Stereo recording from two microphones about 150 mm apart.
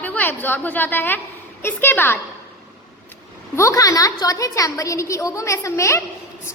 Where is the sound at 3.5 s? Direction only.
20° left (ahead or behind).